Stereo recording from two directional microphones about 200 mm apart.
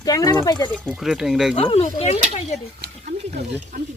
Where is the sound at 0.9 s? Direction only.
Centre (ahead or behind).